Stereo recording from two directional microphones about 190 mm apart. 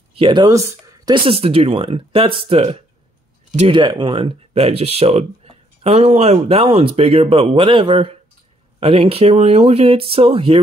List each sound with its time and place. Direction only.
0.1 s speech: 25° right (ahead or behind)